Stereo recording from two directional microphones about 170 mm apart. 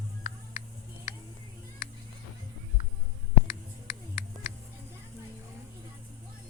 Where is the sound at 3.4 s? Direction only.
60° left (ahead or behind).